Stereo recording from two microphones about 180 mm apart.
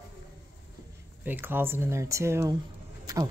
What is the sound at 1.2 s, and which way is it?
A man's voice, 10° right (ahead or behind).